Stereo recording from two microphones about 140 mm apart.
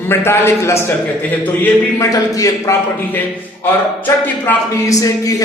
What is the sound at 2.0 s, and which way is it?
Speech, 25° left (ahead or behind).